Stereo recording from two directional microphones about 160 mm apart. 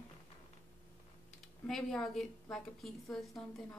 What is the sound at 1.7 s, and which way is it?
A woman's voice, 5° left (ahead or behind).